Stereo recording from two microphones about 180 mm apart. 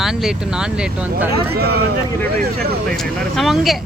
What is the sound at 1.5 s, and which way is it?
Speech, 60° right (ahead or behind).